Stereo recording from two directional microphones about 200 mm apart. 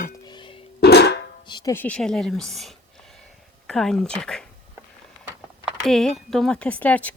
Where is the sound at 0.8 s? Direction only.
55° left (ahead or behind).